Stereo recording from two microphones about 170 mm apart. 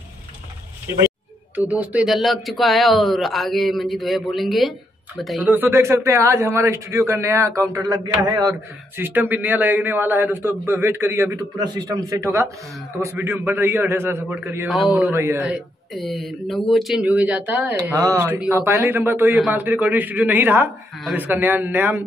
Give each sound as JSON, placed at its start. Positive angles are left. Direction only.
{"t": 1.5, "sound": "a man's voice", "side_deg": -10}
{"t": 5.5, "sound": "a man's voice", "side_deg": -15}
{"t": 8.9, "sound": "a man's voice", "side_deg": -10}